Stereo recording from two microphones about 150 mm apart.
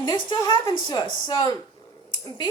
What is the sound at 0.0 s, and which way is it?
A woman's voice, 25° left (ahead or behind).